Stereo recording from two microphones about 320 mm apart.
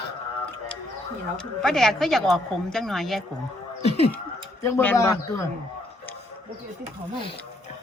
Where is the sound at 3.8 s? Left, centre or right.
Centre.